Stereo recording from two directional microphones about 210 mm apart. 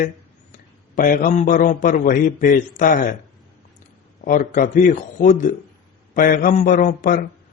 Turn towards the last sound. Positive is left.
turn(degrees=40)  # may be behind; listen again after turning